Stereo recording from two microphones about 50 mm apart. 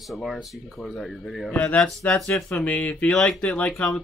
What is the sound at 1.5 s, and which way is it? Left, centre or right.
Speech, left.